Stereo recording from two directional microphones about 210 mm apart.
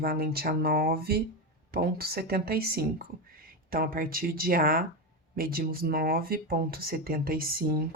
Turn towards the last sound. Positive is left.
turn(degrees=-45)  # may be behind; listen again after turning